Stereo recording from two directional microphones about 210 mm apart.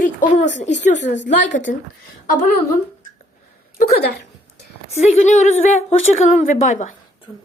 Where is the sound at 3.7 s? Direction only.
50° left (ahead or behind).